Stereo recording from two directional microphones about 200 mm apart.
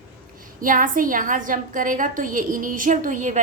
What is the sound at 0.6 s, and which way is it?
A woman's voice, 45° right (ahead or behind).